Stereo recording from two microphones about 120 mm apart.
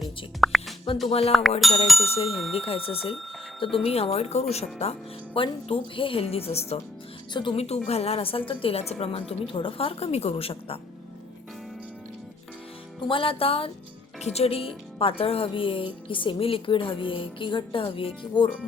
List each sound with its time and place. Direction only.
0.3 s music: centre (ahead or behind)
1.0 s a woman's voice: 55° left (ahead or behind)
1.3 s music: centre (ahead or behind)
2.1 s a woman's voice: 50° left (ahead or behind)
13.1 s a woman's voice: 50° left (ahead or behind)
14.2 s a woman's voice: 60° left (ahead or behind); by 18.5 s 45° left (ahead or behind)